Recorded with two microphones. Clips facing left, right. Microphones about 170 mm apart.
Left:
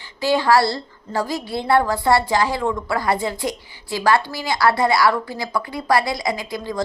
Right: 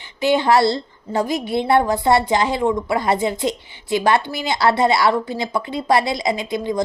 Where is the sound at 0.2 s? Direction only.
20° right (ahead or behind).